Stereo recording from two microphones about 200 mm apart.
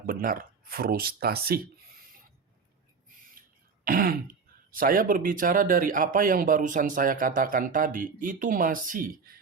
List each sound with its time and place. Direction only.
0.0 s speech: 45° right (ahead or behind)
3.8 s speech: 45° right (ahead or behind)